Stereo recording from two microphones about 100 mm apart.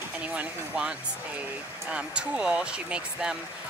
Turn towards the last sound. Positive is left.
turn(degrees=-10)  # may be behind; listen again after turning